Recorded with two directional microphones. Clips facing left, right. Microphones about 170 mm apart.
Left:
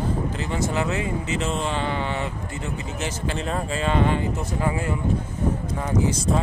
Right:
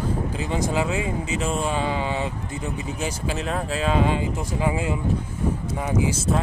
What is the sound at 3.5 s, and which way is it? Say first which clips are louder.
Speech: right 1 dB; 5° right (ahead or behind).